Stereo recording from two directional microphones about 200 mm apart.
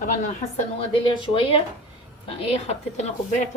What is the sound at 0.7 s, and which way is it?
A woman's voice, 25° left (ahead or behind).